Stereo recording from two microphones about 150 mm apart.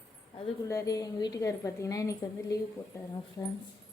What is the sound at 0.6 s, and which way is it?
A woman's voice, 20° left (ahead or behind).